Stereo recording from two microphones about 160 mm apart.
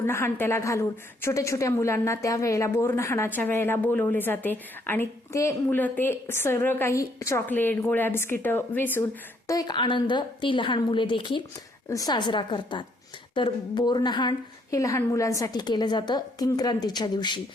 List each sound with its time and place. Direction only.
0.0 s a woman's voice: 15° left (ahead or behind)
9.5 s a woman's voice: 25° left (ahead or behind)